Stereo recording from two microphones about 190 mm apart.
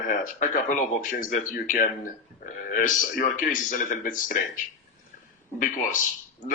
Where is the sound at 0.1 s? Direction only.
45° left (ahead or behind).